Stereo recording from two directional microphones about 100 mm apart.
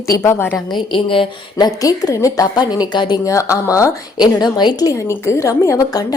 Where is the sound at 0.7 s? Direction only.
60° left (ahead or behind).